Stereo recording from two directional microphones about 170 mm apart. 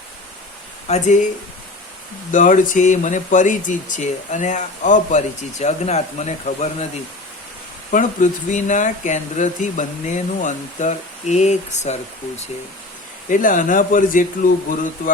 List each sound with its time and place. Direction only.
0.9 s speech: 45° left (ahead or behind)
2.3 s speech: 50° left (ahead or behind)
7.9 s speech: 50° left (ahead or behind)
13.3 s speech: 50° left (ahead or behind)